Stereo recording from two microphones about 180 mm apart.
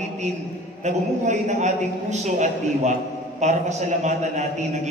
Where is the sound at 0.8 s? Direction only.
40° right (ahead or behind).